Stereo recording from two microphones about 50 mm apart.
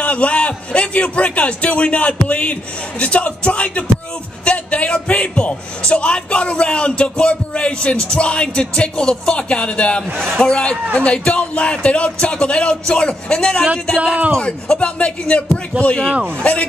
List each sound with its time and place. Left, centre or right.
0.0 s a man's voice: left